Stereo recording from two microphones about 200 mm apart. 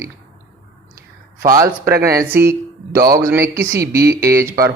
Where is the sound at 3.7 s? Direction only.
50° right (ahead or behind).